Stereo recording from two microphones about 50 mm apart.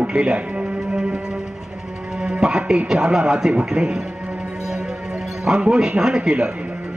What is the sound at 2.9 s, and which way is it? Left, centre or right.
Speech, centre.